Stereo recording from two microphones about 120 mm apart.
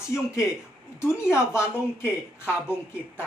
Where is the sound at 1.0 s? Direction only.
20° left (ahead or behind).